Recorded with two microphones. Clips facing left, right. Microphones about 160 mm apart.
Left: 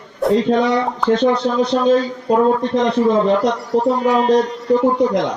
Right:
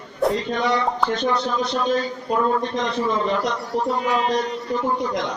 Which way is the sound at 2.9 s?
55° left (ahead or behind).